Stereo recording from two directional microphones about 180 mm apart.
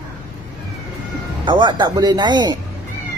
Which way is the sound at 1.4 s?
25° right (ahead or behind).